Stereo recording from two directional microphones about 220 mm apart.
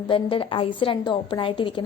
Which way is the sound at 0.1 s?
25° left (ahead or behind).